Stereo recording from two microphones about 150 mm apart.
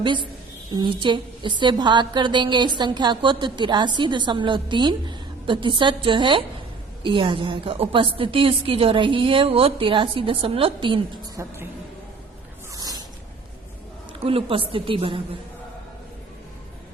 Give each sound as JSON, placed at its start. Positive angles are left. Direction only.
{"t": 0.7, "sound": "a woman's voice", "side_deg": -30}
{"t": 11.3, "sound": "a woman's voice", "side_deg": -15}
{"t": 12.7, "sound": "a sound", "side_deg": -25}
{"t": 14.2, "sound": "a woman's voice", "side_deg": -40}